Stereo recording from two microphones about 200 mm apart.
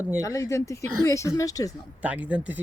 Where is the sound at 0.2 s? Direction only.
15° left (ahead or behind).